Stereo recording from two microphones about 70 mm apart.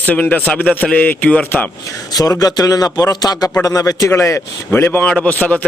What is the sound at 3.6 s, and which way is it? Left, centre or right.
Speech, left.